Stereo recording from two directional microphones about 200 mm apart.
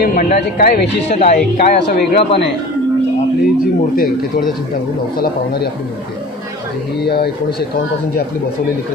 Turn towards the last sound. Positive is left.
turn(degrees=55)  # may be behind; listen again after turning